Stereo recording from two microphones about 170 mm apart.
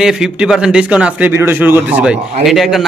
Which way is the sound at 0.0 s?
5° right (ahead or behind).